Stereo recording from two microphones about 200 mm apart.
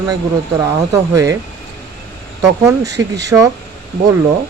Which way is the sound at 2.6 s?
15° right (ahead or behind).